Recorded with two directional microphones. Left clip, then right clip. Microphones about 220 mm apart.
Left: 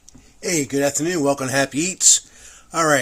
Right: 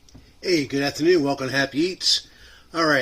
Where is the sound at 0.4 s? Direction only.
60° left (ahead or behind).